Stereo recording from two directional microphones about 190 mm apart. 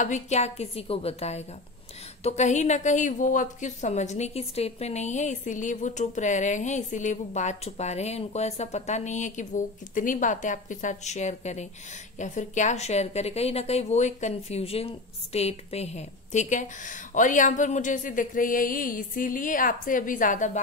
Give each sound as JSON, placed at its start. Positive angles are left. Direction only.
{"t": 0.0, "sound": "a woman's voice", "side_deg": 40}